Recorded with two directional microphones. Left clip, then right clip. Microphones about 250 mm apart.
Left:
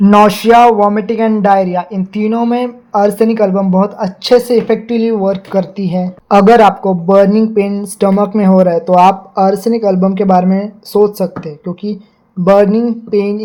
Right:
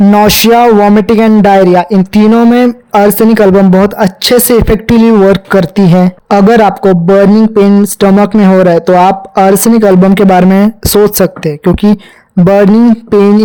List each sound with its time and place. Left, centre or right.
0.1 s speech: right